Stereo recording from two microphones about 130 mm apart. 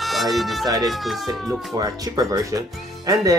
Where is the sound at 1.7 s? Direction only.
30° right (ahead or behind).